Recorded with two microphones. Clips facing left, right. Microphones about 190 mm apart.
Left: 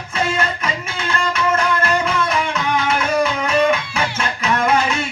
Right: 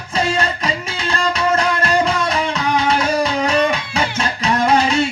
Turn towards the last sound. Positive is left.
turn(degrees=-35)  # may be behind; listen again after turning